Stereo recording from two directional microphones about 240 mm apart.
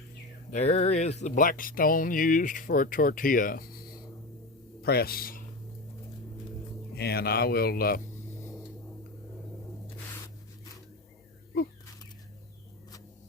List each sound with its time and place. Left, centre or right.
0.5 s speech: left
6.9 s speech: left